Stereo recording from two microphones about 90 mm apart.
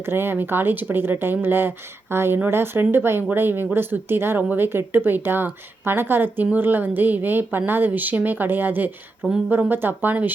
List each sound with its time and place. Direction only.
0.0 s speech: 25° right (ahead or behind)